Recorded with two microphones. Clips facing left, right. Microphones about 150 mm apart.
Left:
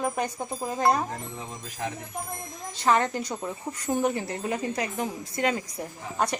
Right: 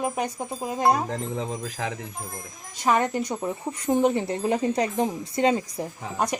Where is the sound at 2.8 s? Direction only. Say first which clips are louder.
Right 1 dB; 15° right (ahead or behind).